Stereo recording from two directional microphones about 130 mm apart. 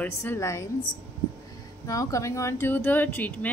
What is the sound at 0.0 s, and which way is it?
Speech, 20° left (ahead or behind).